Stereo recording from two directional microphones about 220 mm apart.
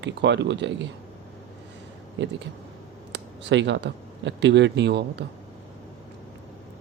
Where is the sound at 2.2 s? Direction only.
55° right (ahead or behind).